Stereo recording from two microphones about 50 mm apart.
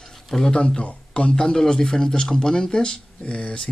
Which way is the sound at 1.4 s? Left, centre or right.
Centre.